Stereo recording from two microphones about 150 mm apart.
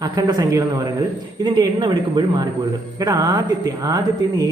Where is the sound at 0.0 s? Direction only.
25° right (ahead or behind).